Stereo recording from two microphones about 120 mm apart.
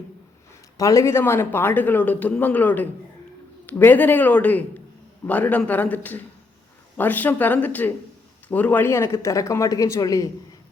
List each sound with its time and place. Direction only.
0.8 s speech: 25° left (ahead or behind)